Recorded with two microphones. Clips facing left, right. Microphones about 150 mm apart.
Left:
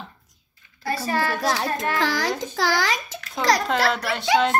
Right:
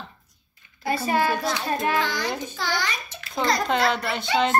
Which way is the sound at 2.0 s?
90° left.